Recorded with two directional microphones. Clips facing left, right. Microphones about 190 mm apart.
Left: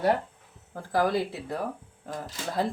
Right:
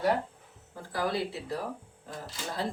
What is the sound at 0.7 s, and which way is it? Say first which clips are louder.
Speech: left 6 dB; 55° left (ahead or behind).